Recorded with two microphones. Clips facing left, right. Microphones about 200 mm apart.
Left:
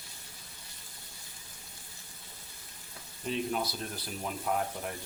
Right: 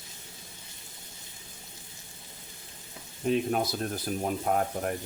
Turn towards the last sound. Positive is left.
turn(degrees=-50)  # may be behind; listen again after turning